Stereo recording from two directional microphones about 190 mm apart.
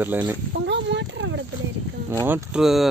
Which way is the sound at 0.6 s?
70° right (ahead or behind).